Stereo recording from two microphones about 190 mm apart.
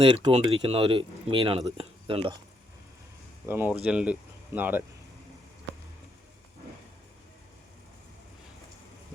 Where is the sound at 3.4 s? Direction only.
10° right (ahead or behind).